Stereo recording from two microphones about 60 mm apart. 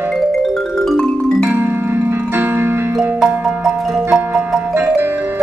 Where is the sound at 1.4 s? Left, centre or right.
Right.